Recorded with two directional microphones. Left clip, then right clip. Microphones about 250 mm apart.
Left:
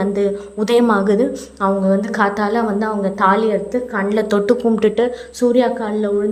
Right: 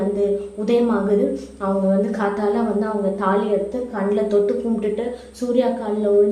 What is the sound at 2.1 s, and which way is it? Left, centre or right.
A woman's voice, left.